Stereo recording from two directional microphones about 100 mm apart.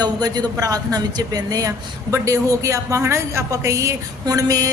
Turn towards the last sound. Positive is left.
turn(degrees=-35)  # may be behind; listen again after turning